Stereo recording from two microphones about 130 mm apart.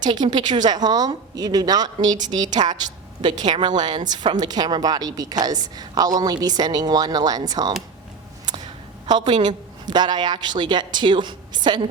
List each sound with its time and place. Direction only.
0.0 s a woman's voice: 35° right (ahead or behind)